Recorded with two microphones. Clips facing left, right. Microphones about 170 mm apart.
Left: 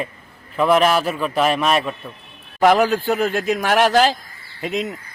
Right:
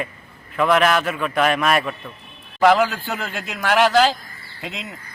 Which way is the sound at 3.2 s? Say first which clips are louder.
Left 11 dB; 45° left (ahead or behind).